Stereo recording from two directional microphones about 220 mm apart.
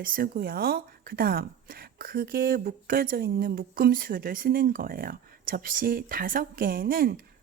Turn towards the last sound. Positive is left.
turn(degrees=-40)  # may be behind; listen again after turning